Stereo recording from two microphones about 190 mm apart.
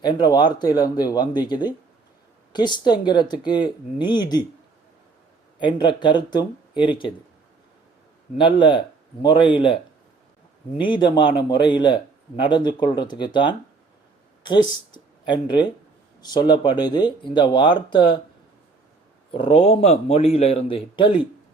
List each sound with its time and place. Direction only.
0.0 s speech: 20° left (ahead or behind)
5.5 s speech: 25° left (ahead or behind)
8.4 s speech: 25° left (ahead or behind)
10.8 s speech: 25° left (ahead or behind)
19.3 s speech: 30° left (ahead or behind)